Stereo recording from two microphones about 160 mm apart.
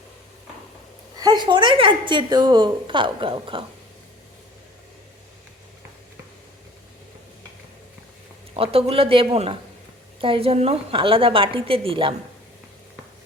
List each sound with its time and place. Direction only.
1.2 s a woman's voice: 25° right (ahead or behind)
8.5 s a woman's voice: 35° right (ahead or behind)